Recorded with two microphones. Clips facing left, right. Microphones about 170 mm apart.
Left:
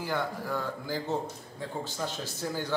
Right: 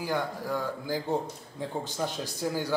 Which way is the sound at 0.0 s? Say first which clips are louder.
Right 1 dB; 10° right (ahead or behind).